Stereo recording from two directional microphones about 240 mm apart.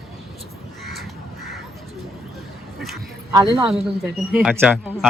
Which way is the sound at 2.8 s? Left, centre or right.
Centre.